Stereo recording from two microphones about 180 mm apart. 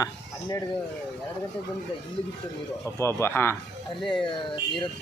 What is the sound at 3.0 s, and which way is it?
Speech, 15° left (ahead or behind).